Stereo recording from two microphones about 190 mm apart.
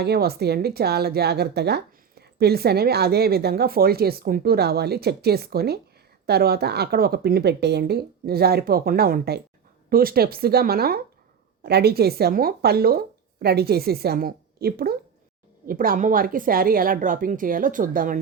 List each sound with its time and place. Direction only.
0.0 s a woman's voice: 55° right (ahead or behind)